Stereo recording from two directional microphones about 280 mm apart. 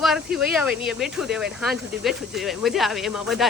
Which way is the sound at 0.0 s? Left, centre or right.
Centre.